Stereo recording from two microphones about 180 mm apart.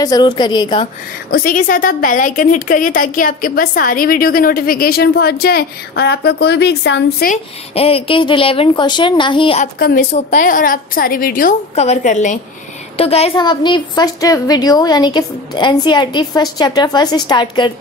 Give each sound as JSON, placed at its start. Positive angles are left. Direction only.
{"t": 0.0, "sound": "a woman's voice", "side_deg": 20}
{"t": 1.3, "sound": "a woman's voice", "side_deg": 50}
{"t": 7.7, "sound": "a woman's voice", "side_deg": 30}
{"t": 9.8, "sound": "a woman's voice", "side_deg": 55}
{"t": 10.1, "sound": "a woman's voice", "side_deg": 45}